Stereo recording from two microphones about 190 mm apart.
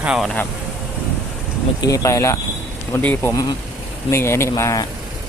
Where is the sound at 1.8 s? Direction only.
20° left (ahead or behind).